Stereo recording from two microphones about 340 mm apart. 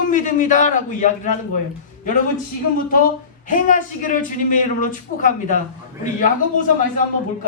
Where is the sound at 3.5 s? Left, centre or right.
Left.